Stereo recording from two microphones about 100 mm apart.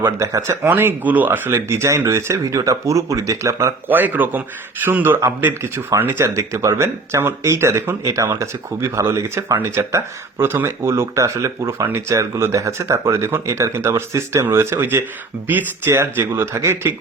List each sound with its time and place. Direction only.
0.0 s speech: 30° right (ahead or behind)
0.7 s speech: 20° right (ahead or behind)
3.8 s speech: 20° right (ahead or behind)